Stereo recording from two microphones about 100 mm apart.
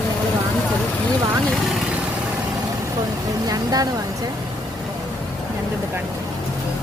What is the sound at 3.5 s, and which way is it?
Speech, 40° right (ahead or behind).